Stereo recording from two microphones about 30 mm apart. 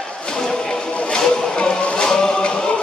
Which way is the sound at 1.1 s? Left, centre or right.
Left.